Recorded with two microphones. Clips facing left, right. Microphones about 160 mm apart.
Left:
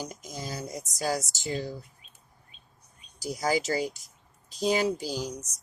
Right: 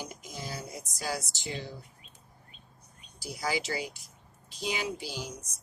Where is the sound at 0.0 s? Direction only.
40° left (ahead or behind).